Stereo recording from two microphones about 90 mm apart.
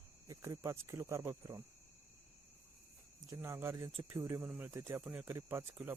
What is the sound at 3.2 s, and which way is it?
Speech, 30° right (ahead or behind).